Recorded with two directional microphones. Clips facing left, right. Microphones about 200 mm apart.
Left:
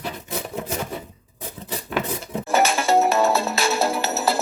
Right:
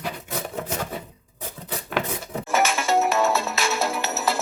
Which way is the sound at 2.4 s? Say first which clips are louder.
Left 3 dB; 35° left (ahead or behind).